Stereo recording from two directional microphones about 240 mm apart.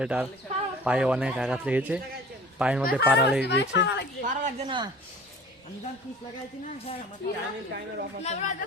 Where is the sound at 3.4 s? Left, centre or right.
Left.